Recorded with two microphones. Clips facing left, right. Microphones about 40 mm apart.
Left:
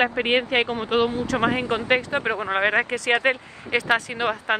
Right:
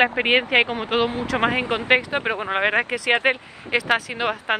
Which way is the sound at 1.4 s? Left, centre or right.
Right.